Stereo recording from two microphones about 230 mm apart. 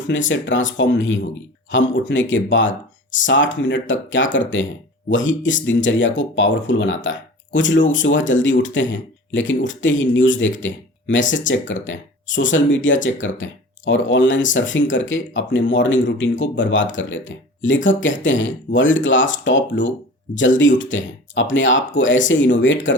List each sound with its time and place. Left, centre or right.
0.1 s speech: left
5.6 s speech: left